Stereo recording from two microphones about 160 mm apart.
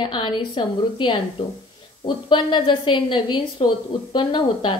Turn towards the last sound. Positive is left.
turn(degrees=30)  # may be behind; listen again after turning